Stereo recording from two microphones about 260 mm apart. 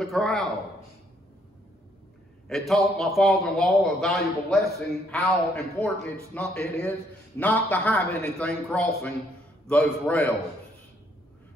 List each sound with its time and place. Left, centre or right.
0.0 s a man's voice: centre
2.4 s a man's voice: centre